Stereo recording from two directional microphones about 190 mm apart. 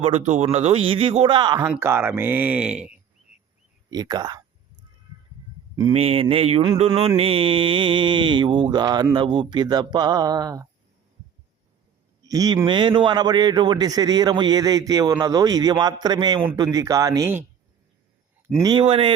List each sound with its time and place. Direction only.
0.0 s a man's voice: 35° right (ahead or behind)
1.6 s speech: 10° right (ahead or behind)
3.8 s speech: 20° right (ahead or behind)
5.9 s a man's voice: 30° right (ahead or behind)
12.3 s a man's voice: 20° right (ahead or behind)
18.6 s a man's voice: 25° right (ahead or behind)